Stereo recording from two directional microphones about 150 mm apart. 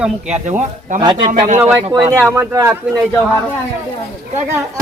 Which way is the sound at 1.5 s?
15° right (ahead or behind).